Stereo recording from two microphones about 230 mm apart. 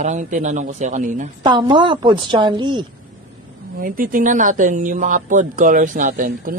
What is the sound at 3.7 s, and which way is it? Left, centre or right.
Speech, right.